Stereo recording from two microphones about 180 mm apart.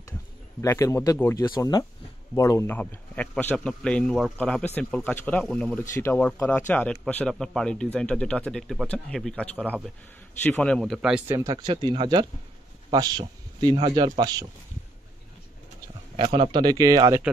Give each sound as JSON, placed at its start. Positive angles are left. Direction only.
{"t": 0.6, "sound": "a man's voice", "side_deg": 15}
{"t": 11.3, "sound": "speech", "side_deg": -20}
{"t": 16.3, "sound": "speech", "side_deg": -25}